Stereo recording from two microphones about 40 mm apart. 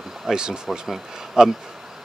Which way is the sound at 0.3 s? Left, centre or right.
Centre.